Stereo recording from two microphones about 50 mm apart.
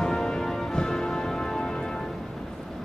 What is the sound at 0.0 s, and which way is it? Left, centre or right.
Music, centre.